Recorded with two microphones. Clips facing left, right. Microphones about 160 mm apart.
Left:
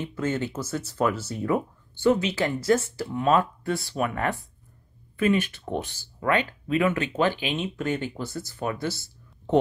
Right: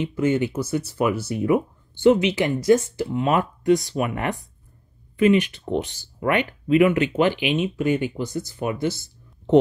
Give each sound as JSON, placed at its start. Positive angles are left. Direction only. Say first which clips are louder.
{"t": 0.0, "sound": "speech", "louder": "right 6 dB", "side_deg": -15}